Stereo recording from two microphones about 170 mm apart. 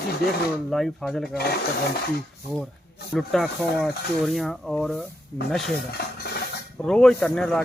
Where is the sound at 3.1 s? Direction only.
Centre (ahead or behind).